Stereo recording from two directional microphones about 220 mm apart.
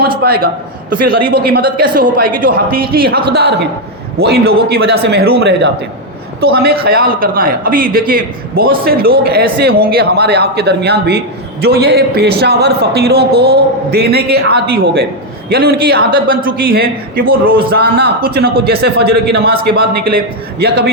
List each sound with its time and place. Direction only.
0.2 s a man's voice: 45° right (ahead or behind)